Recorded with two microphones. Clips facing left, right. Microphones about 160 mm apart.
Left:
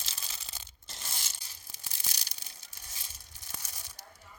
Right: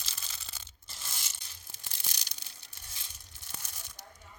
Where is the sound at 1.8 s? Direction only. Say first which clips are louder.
Left 1 dB; 10° left (ahead or behind).